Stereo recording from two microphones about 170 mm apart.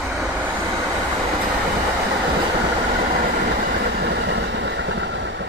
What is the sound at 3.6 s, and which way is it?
Train, 80° right.